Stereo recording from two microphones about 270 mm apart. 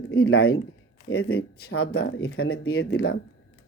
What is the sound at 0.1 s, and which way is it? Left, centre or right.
Speech, left.